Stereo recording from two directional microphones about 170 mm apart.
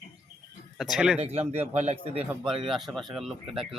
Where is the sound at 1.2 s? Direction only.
35° right (ahead or behind).